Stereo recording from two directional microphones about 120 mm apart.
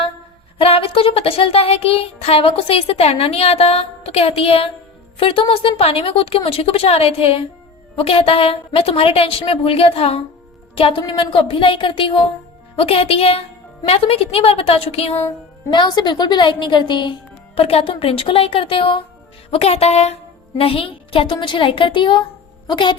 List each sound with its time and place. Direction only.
0.6 s music: 55° left (ahead or behind)
5.1 s a woman's voice: 45° left (ahead or behind)
13.8 s music: 55° left (ahead or behind)
15.7 s a woman's voice: 40° left (ahead or behind)
19.5 s music: 60° left (ahead or behind)
20.6 s a woman's voice: 50° left (ahead or behind)